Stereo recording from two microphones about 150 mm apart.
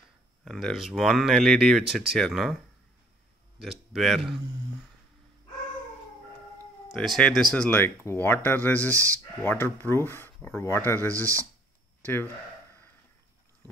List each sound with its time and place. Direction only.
0.5 s speech: centre (ahead or behind)
3.6 s speech: centre (ahead or behind)
6.9 s speech: 5° left (ahead or behind)
8.9 s speech: 20° right (ahead or behind)
9.4 s speech: 15° left (ahead or behind)
11.1 s speech: 20° right (ahead or behind)
12.0 s speech: 15° left (ahead or behind)